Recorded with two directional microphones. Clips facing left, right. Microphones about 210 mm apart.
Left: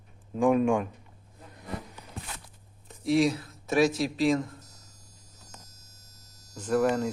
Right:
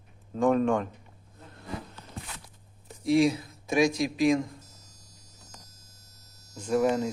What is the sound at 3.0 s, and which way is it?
Speech, centre (ahead or behind).